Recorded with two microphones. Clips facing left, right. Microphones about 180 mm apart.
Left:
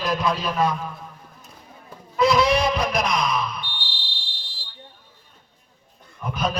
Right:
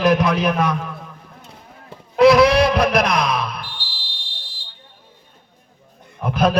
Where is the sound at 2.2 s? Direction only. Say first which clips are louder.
Right 7 dB; 70° right (ahead or behind).